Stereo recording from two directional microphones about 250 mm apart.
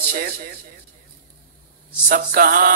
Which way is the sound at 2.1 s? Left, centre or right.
Right.